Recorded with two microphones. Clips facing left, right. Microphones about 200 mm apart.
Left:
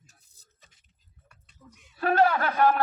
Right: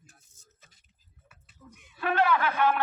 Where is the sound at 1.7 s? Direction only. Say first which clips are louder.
Right 2 dB; 55° right (ahead or behind).